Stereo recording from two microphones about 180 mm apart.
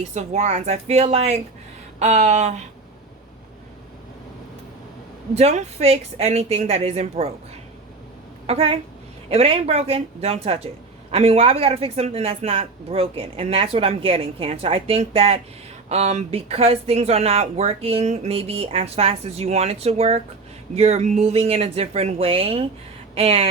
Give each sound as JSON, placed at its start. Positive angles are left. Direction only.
{"t": 0.0, "sound": "speech", "side_deg": -40}
{"t": 5.3, "sound": "speech", "side_deg": -35}
{"t": 8.4, "sound": "speech", "side_deg": -30}